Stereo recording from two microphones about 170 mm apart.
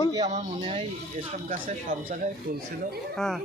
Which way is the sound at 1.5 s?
50° right (ahead or behind).